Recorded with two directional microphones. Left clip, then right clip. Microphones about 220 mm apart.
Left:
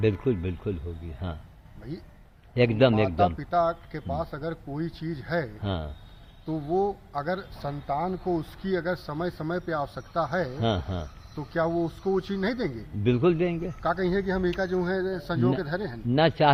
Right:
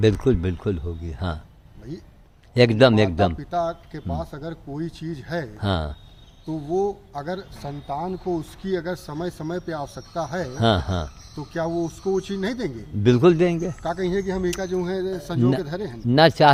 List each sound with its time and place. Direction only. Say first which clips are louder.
0.0 s speech: right 6 dB; 30° right (ahead or behind)
2.6 s speech: right 6 dB; 30° right (ahead or behind)
3.3 s speech: even; centre (ahead or behind)
5.5 s speech: right 7 dB; 30° right (ahead or behind)
6.5 s speech: right 2 dB; centre (ahead or behind)
10.6 s speech: right 7 dB; 30° right (ahead or behind)
11.3 s speech: right 1 dB; 5° right (ahead or behind)
13.0 s speech: right 7 dB; 30° right (ahead or behind)
13.8 s speech: even; centre (ahead or behind)
16.0 s speech: right 7 dB; 30° right (ahead or behind)